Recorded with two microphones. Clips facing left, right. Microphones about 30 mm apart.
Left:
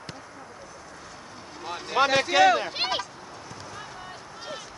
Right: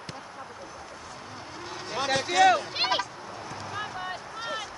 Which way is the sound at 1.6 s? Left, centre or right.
Centre.